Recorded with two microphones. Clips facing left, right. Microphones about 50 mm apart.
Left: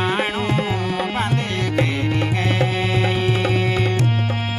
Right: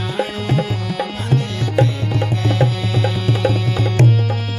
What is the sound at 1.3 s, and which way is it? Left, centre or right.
Tabla, left.